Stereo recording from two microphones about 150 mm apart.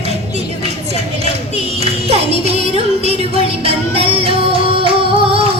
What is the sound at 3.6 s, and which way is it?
Music, 40° right (ahead or behind).